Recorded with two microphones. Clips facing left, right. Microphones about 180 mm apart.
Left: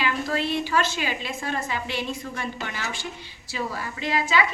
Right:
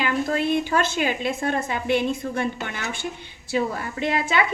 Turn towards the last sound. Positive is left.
turn(degrees=-55)  # may be behind; listen again after turning